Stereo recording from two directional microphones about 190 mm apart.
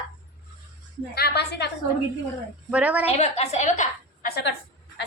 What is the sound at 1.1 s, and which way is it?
Speech, 60° left (ahead or behind).